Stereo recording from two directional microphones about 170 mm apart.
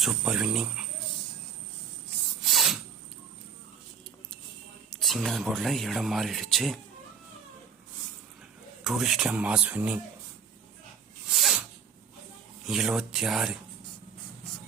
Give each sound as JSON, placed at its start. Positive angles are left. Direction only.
{"t": 0.0, "sound": "speech", "side_deg": -5}
{"t": 2.4, "sound": "a sound", "side_deg": 0}
{"t": 4.9, "sound": "speech", "side_deg": 0}
{"t": 8.8, "sound": "speech", "side_deg": 0}
{"t": 11.3, "sound": "sneeze", "side_deg": 0}
{"t": 12.6, "sound": "speech", "side_deg": -5}